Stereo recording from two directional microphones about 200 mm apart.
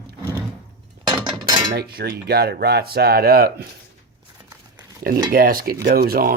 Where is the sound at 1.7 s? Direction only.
55° right (ahead or behind).